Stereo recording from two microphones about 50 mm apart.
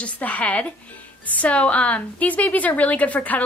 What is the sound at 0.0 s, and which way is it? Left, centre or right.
A woman's voice, left.